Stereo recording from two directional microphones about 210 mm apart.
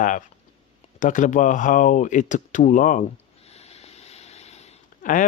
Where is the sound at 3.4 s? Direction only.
30° left (ahead or behind).